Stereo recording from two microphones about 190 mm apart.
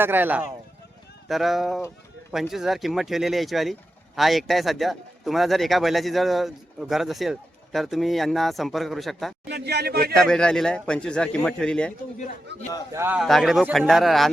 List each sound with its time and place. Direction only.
0.0 s speech: 10° right (ahead or behind)
9.5 s speech: 60° right (ahead or behind)
10.2 s speech: 5° left (ahead or behind)
12.9 s speech: 10° right (ahead or behind)
13.2 s speech: centre (ahead or behind)